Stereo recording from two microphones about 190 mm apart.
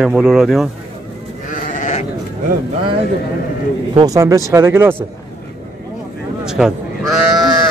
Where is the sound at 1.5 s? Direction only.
40° left (ahead or behind).